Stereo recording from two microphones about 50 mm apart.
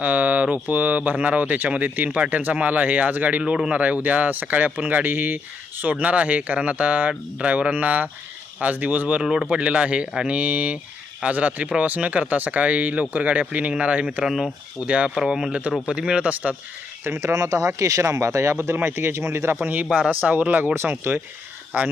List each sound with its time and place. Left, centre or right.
0.0 s speech: right
2.0 s speech: centre
2.3 s speech: right
7.1 s speech: centre
7.5 s speech: right
9.2 s speech: centre
9.5 s speech: right
14.3 s speech: centre
14.8 s speech: right
15.1 s speech: centre; by 16.6 s right
17.2 s speech: right
18.8 s a man's voice: right
19.6 s speech: right
21.7 s speech: right